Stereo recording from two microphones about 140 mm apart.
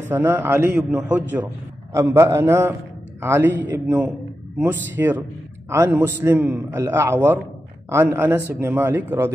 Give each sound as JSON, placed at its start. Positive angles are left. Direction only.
{"t": 0.1, "sound": "a man's voice", "side_deg": -15}